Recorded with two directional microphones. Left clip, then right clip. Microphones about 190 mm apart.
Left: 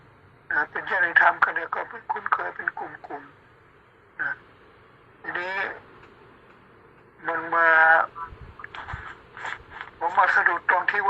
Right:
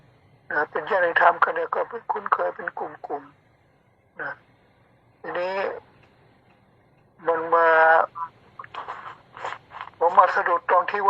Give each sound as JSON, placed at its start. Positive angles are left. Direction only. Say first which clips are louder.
{"t": 0.4, "sound": "speech", "louder": "right 1 dB", "side_deg": -40}
{"t": 5.2, "sound": "speech", "louder": "right 2 dB", "side_deg": -40}
{"t": 7.2, "sound": "speech", "louder": "right 3 dB", "side_deg": -35}
{"t": 8.7, "sound": "a sound", "louder": "right 3 dB", "side_deg": -35}